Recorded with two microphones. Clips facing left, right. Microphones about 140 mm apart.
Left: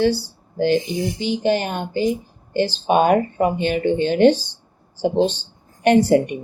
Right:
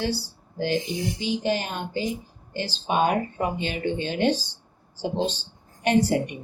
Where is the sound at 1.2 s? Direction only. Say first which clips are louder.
Left 6 dB; 60° left (ahead or behind).